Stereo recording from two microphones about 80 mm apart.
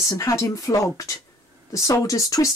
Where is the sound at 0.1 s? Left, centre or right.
Left.